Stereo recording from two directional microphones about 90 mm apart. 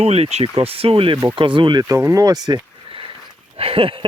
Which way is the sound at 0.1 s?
85° right.